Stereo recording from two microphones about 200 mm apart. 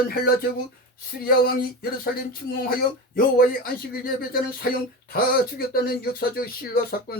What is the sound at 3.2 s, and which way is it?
Speech, 45° left (ahead or behind).